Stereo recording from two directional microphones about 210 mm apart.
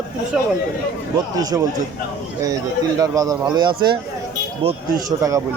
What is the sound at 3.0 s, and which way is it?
Speech, 15° right (ahead or behind).